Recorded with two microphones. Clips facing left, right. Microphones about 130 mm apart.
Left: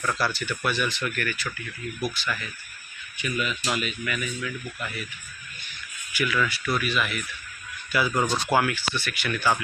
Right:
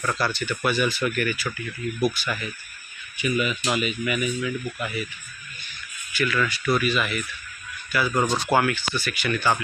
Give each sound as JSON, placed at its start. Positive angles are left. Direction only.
{"t": 0.0, "sound": "speech", "side_deg": 0}
{"t": 4.0, "sound": "speech", "side_deg": -15}
{"t": 6.1, "sound": "speech", "side_deg": 10}
{"t": 7.9, "sound": "speech", "side_deg": 20}
{"t": 8.5, "sound": "speech", "side_deg": 5}